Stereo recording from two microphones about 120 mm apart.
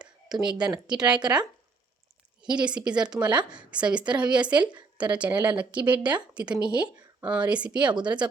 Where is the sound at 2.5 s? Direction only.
10° right (ahead or behind).